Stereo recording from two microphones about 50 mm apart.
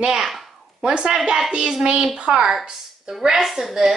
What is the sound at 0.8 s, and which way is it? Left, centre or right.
A woman's voice, centre.